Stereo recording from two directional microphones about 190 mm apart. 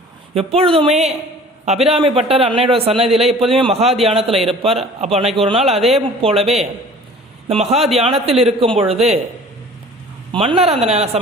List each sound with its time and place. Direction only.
0.3 s a man's voice: 30° right (ahead or behind)
10.3 s a man's voice: 30° right (ahead or behind)